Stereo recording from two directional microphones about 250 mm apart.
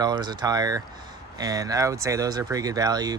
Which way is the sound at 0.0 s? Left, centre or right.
Centre.